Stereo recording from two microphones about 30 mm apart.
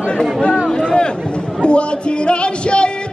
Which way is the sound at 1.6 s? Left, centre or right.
Left.